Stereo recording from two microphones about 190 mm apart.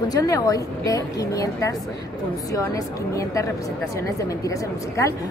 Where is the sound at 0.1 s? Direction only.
20° left (ahead or behind).